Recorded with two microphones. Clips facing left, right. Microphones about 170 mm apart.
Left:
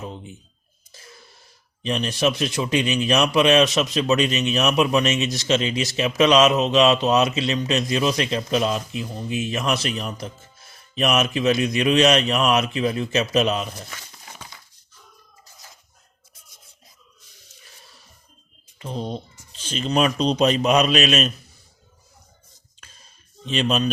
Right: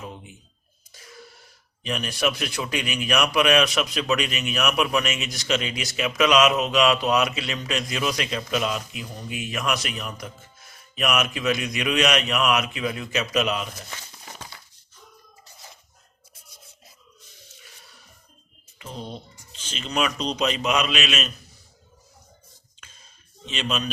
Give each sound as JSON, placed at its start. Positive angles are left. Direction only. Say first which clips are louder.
{"t": 0.0, "sound": "a sound", "louder": "left 4 dB", "side_deg": 25}
{"t": 1.8, "sound": "a man's voice", "louder": "left 4 dB", "side_deg": 25}
{"t": 18.8, "sound": "a man's voice", "louder": "left 7 dB", "side_deg": 35}
{"t": 23.5, "sound": "a man's voice", "louder": "left 7 dB", "side_deg": 40}